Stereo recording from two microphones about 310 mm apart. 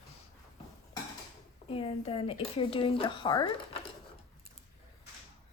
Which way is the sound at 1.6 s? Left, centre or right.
Centre.